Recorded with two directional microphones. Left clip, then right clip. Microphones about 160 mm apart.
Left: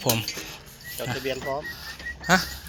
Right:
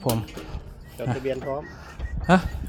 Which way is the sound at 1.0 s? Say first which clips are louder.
Right 1 dB; 50° right (ahead or behind).